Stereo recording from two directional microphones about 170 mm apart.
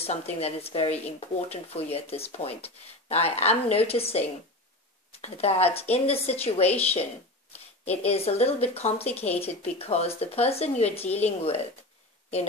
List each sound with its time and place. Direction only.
0.0 s speech: 40° left (ahead or behind)
7.8 s speech: 40° left (ahead or behind)